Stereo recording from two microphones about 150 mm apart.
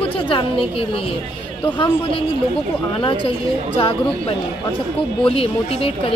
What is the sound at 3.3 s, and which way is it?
Speech, 35° left (ahead or behind).